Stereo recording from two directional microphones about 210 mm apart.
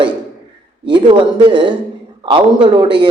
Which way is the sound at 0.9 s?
25° right (ahead or behind).